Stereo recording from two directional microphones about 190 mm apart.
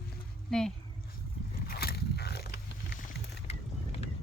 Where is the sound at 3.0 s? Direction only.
35° left (ahead or behind).